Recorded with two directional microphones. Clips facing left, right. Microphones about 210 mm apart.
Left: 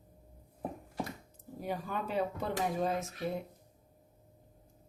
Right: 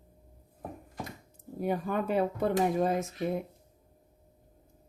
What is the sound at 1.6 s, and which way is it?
Speech, 55° right (ahead or behind).